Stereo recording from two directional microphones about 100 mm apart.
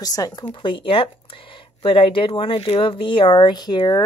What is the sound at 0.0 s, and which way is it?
Speech, 40° left (ahead or behind).